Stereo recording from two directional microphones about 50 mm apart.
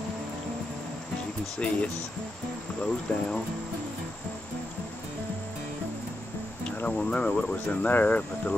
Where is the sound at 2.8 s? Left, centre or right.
Centre.